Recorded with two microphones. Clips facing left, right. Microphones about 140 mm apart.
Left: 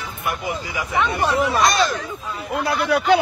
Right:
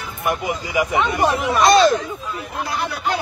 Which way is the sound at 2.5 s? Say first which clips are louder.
Left 7 dB; 70° left (ahead or behind).